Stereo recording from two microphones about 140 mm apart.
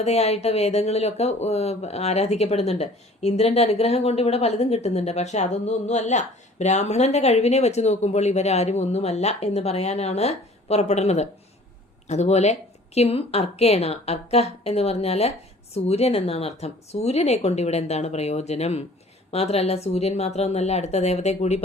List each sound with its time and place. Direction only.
0.0 s speech: 50° left (ahead or behind)